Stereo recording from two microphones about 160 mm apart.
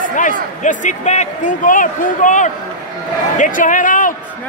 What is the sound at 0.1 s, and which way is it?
Speech, 55° left (ahead or behind).